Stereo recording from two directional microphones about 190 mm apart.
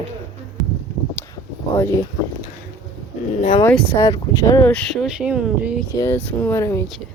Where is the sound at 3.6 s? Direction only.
10° left (ahead or behind).